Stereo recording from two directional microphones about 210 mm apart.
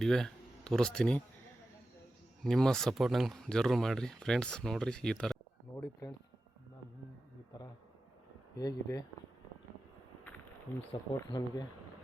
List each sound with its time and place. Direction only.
0.0 s speech: centre (ahead or behind)
2.4 s speech: centre (ahead or behind)
5.7 s speech: 15° left (ahead or behind)
8.5 s speech: 15° left (ahead or behind)
11.3 s speech: 20° left (ahead or behind)